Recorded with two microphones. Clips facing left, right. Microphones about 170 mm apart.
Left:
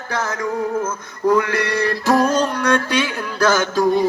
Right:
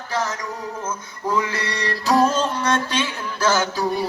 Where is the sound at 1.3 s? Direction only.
55° left (ahead or behind).